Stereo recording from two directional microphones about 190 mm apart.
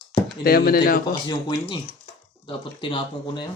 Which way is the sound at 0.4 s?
50° left (ahead or behind).